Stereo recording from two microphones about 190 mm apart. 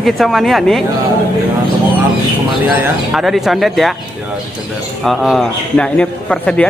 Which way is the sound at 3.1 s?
Centre (ahead or behind).